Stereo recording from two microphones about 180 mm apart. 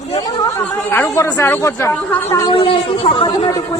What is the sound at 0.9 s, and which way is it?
Speech, 10° left (ahead or behind).